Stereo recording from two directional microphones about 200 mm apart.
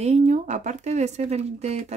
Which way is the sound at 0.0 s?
35° right (ahead or behind).